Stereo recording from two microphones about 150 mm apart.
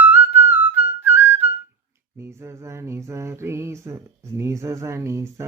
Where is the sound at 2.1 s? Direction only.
15° right (ahead or behind).